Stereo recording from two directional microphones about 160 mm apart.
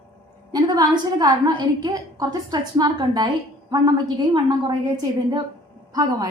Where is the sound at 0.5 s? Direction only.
25° right (ahead or behind).